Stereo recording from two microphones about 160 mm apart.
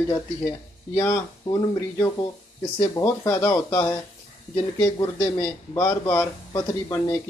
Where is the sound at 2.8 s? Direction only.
20° left (ahead or behind).